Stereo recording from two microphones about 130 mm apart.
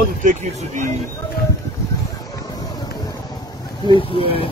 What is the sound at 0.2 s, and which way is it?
Speech, 70° right (ahead or behind).